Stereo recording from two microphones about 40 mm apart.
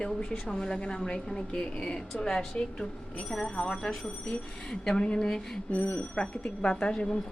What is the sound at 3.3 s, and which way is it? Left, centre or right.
A woman's voice, left.